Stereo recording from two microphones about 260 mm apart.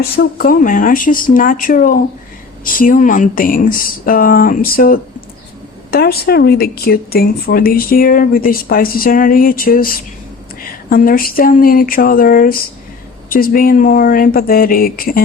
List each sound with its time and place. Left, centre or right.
0.2 s speech: left